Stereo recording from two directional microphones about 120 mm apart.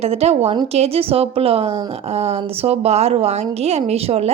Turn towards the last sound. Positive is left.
turn(degrees=-60)  # may be behind; listen again after turning